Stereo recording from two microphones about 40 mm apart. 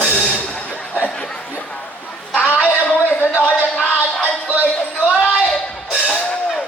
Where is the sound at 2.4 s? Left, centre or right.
Left.